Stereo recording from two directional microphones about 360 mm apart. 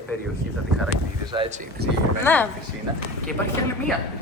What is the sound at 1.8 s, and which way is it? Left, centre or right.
Speech, right.